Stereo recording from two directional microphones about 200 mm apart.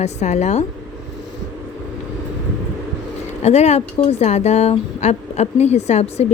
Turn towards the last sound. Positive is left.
turn(degrees=35)  # may be behind; listen again after turning